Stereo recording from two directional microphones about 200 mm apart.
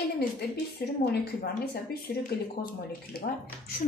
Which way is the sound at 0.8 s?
50° left (ahead or behind).